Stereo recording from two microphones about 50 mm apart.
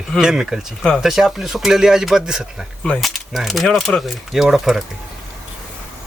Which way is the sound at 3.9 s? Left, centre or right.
Left.